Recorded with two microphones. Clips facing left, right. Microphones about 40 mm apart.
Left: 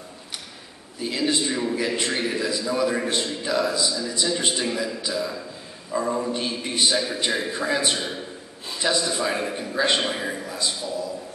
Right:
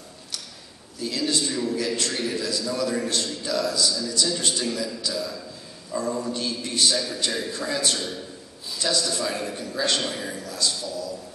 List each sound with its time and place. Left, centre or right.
0.9 s a man's voice: left